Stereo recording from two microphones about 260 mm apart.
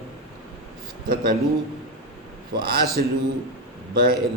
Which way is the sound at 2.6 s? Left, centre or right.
Right.